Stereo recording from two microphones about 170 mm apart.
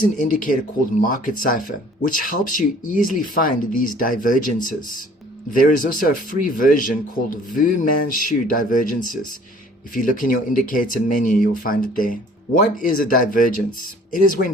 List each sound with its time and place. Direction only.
0.0 s speech: 55° left (ahead or behind)